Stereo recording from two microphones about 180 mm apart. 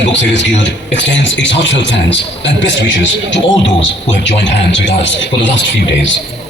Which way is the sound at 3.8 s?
85° left.